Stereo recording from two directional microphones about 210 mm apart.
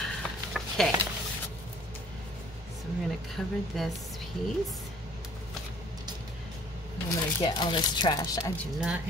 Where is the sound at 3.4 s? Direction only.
5° left (ahead or behind).